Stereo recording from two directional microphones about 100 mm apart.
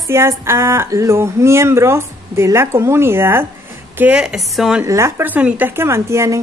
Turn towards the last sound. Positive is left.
turn(degrees=-30)  # may be behind; listen again after turning